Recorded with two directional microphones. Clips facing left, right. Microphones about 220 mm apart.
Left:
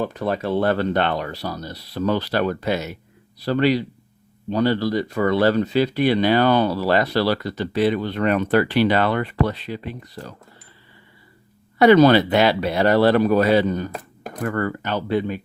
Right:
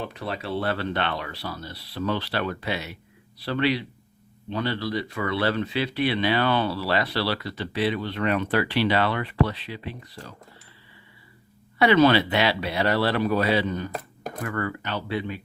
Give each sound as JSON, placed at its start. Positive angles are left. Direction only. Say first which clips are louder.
{"t": 0.0, "sound": "speech", "louder": "left 8 dB", "side_deg": 45}
{"t": 11.8, "sound": "speech", "louder": "left 6 dB", "side_deg": 40}